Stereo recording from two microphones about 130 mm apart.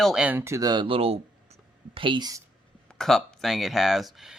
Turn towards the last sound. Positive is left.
turn(degrees=0)  # may be behind; listen again after turning